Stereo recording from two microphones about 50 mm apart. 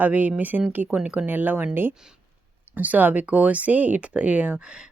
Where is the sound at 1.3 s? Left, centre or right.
Right.